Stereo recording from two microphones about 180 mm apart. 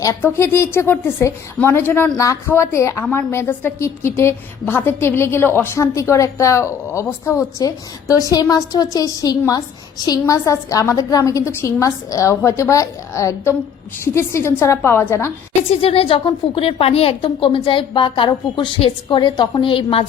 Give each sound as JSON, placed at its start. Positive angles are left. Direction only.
{"t": 0.0, "sound": "a woman's voice", "side_deg": 15}
{"t": 15.7, "sound": "a woman's voice", "side_deg": 30}